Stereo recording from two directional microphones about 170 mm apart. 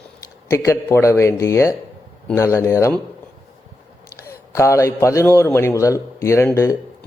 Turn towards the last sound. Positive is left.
turn(degrees=15)  # may be behind; listen again after turning